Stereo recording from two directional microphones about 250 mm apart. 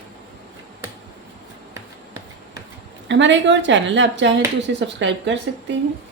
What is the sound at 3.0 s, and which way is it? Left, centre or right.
Speech, right.